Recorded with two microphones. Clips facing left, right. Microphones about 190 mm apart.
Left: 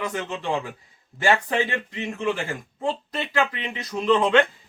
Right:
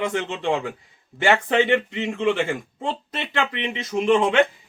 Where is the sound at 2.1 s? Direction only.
75° right (ahead or behind).